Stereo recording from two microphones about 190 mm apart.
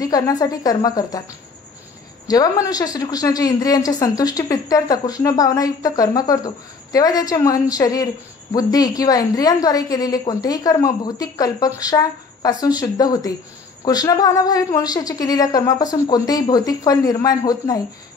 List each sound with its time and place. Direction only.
0.0 s a woman's voice: 20° left (ahead or behind)
2.2 s a woman's voice: 20° left (ahead or behind)